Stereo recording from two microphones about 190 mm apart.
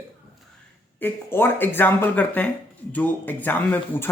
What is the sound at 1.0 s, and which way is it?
Speech, 10° left (ahead or behind).